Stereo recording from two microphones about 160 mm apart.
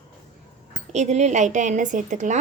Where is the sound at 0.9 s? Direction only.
45° right (ahead or behind).